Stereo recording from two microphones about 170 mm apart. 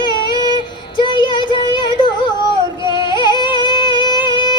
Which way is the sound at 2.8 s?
25° left (ahead or behind).